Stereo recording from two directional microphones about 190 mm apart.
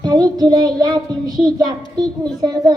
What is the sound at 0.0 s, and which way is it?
Child singing, 20° right (ahead or behind).